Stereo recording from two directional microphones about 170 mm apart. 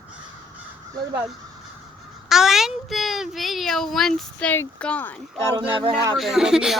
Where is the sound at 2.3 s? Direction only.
Centre (ahead or behind).